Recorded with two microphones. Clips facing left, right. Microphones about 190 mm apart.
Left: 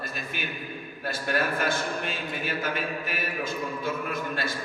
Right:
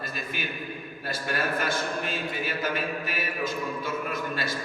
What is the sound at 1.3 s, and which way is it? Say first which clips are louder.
Speech: left 2 dB; 50° left (ahead or behind).